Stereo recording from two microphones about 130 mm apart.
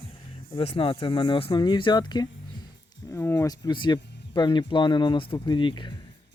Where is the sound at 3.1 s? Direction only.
20° left (ahead or behind).